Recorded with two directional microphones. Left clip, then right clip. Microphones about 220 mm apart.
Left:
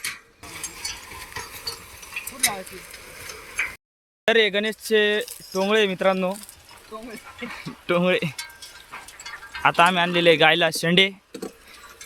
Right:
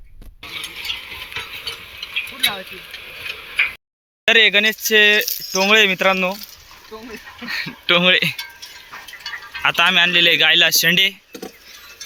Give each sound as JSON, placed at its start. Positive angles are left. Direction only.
{"t": 0.4, "sound": "stir", "side_deg": 15}
{"t": 2.3, "sound": "a sound", "side_deg": 15}
{"t": 3.2, "sound": "tick-tock", "side_deg": 15}
{"t": 4.3, "sound": "speech", "side_deg": 0}
{"t": 7.4, "sound": "speech", "side_deg": 5}